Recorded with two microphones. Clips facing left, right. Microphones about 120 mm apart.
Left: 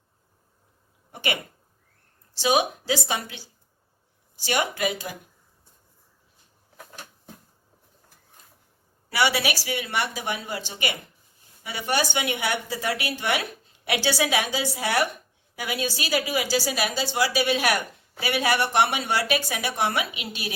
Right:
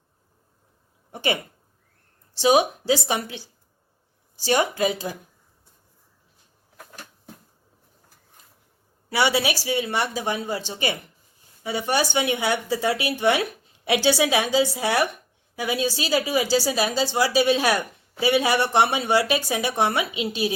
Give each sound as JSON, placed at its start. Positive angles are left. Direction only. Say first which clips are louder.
{"t": 2.3, "sound": "speech", "louder": "right 4 dB", "side_deg": -30}
{"t": 9.0, "sound": "speech", "louder": "right 2 dB", "side_deg": -25}